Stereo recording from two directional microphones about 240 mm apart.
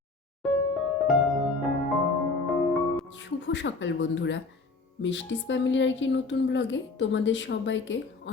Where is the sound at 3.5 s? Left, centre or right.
Left.